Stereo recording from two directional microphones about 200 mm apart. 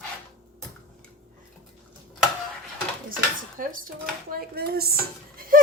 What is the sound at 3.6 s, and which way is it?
Speech, 45° right (ahead or behind).